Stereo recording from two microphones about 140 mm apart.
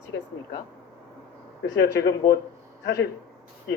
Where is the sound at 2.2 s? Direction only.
45° left (ahead or behind).